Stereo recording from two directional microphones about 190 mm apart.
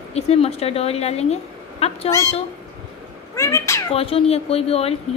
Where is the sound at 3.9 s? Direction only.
30° left (ahead or behind).